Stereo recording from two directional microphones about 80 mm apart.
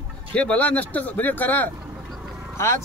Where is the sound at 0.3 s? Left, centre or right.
Centre.